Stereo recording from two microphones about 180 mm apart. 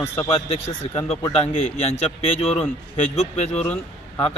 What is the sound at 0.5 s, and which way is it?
Speech, 35° left (ahead or behind).